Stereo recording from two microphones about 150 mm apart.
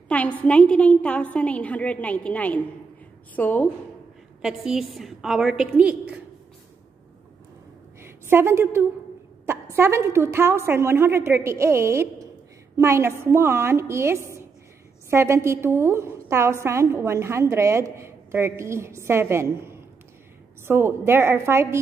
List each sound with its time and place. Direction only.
0.1 s a woman's voice: 10° left (ahead or behind)
4.4 s a woman's voice: 5° right (ahead or behind)
8.0 s a sound: 15° right (ahead or behind)
9.5 s a woman's voice: 20° right (ahead or behind)